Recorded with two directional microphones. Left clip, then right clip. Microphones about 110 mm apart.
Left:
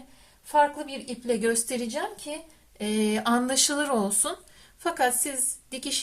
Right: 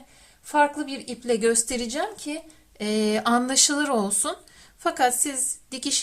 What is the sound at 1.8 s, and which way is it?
Speech, 60° right (ahead or behind).